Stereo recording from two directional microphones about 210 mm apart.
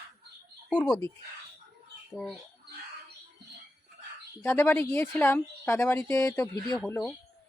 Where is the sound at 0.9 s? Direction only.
15° left (ahead or behind).